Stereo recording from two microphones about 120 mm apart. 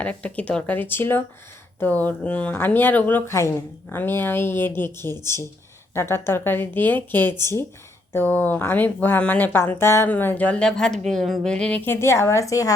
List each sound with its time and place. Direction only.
0.0 s speech: 10° left (ahead or behind); by 12.7 s 25° left (ahead or behind)